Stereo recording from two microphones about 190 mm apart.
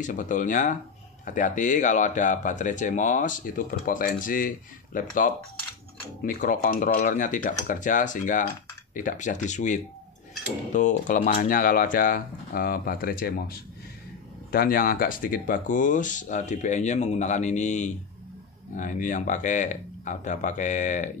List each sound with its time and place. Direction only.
0.0 s speech: 45° left (ahead or behind)
14.5 s speech: 50° left (ahead or behind)